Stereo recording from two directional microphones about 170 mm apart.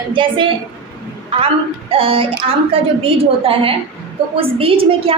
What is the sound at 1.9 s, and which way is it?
A woman's voice, 30° right (ahead or behind).